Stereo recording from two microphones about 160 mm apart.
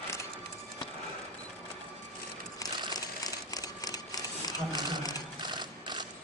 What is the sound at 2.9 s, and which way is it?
Sewing machine, 25° left (ahead or behind).